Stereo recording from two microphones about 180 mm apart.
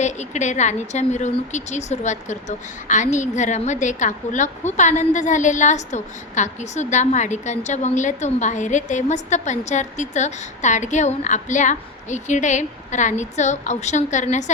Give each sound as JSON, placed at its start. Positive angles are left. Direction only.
{"t": 0.0, "sound": "a woman's voice", "side_deg": 40}